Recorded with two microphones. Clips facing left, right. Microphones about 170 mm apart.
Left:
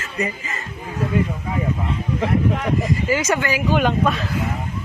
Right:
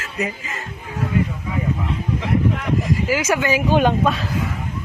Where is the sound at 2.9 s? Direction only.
5° right (ahead or behind).